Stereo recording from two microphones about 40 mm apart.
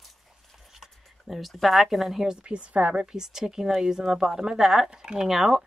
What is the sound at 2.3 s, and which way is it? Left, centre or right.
Speech, right.